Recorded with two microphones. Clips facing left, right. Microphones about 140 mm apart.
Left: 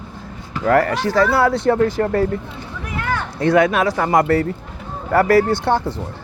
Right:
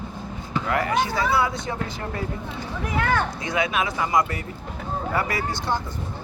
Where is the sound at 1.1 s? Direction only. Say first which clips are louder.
Left 7 dB; 70° left (ahead or behind).